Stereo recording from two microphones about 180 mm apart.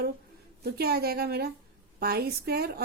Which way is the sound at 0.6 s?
60° right (ahead or behind).